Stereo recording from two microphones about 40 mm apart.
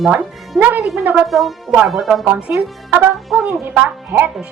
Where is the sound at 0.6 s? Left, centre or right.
Right.